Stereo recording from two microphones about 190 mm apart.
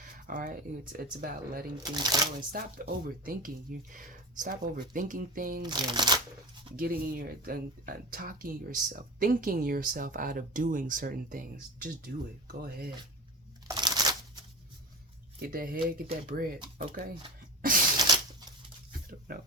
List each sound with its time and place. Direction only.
0.0 s speech: 45° right (ahead or behind)
1.8 s speech: 20° right (ahead or behind)
2.5 s speech: 50° right (ahead or behind)
5.6 s speech: 25° right (ahead or behind)
6.7 s speech: 50° right (ahead or behind)
13.7 s a sound: 20° right (ahead or behind)
15.4 s speech: 50° right (ahead or behind)
17.6 s a sound: 50° right (ahead or behind)
17.9 s a sound: 20° right (ahead or behind)
19.3 s speech: 50° right (ahead or behind)